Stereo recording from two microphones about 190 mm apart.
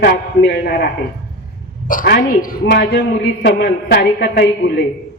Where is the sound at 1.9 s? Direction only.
50° left (ahead or behind).